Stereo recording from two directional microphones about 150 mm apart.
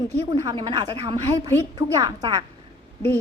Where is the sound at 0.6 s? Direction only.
25° right (ahead or behind).